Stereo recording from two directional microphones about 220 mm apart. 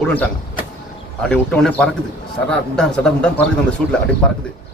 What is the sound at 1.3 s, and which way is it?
A man's voice, 5° left (ahead or behind).